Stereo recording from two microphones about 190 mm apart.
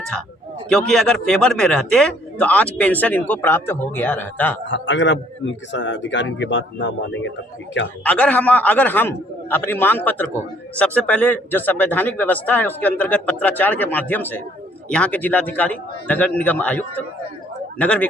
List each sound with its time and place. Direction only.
0.0 s a man's voice: 5° left (ahead or behind)
4.7 s speech: 70° left (ahead or behind)
8.0 s a man's voice: 5° left (ahead or behind)